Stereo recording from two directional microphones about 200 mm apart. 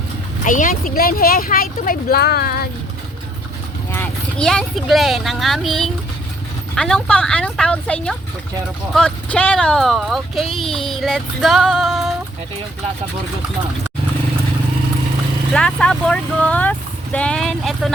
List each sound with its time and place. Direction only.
0.4 s speech: 40° left (ahead or behind)
3.9 s speech: 5° left (ahead or behind)
15.5 s speech: 5° left (ahead or behind)